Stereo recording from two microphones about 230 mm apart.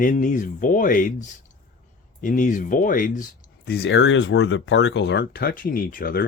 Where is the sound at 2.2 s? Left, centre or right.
Left.